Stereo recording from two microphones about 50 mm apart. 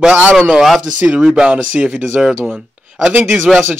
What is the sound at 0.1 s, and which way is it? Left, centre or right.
Speech, right.